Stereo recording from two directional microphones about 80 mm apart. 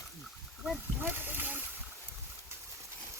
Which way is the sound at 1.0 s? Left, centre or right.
Right.